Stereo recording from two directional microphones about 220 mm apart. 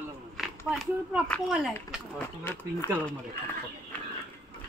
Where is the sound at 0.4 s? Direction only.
Centre (ahead or behind).